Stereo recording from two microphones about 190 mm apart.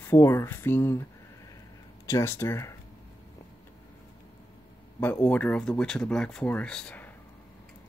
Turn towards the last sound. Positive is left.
turn(degrees=5)  # may be behind; listen again after turning